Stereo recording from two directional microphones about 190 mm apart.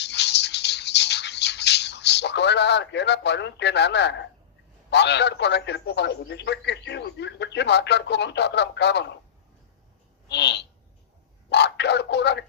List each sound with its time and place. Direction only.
0.0 s music: 65° left (ahead or behind)
4.9 s a man's voice: 65° left (ahead or behind)
10.2 s a sound: 65° left (ahead or behind)
11.4 s speech: 65° left (ahead or behind)